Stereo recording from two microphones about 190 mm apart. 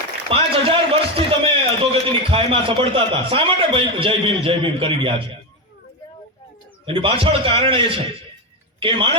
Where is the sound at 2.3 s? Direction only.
30° right (ahead or behind).